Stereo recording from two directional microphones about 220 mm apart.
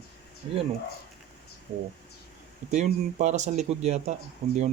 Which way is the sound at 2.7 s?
30° right (ahead or behind).